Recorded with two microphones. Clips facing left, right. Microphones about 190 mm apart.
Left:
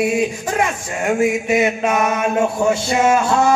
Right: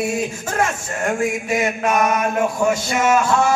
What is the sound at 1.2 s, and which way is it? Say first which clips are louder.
Mantra: left 4 dB; 20° left (ahead or behind).